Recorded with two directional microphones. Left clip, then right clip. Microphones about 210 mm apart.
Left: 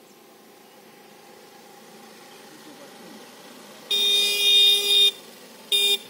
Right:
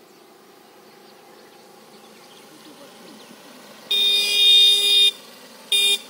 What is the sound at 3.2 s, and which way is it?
Boiling, 50° left (ahead or behind).